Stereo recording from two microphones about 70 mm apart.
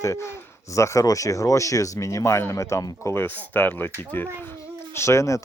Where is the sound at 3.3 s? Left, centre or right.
Left.